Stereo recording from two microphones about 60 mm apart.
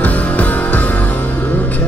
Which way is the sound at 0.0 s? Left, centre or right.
Left.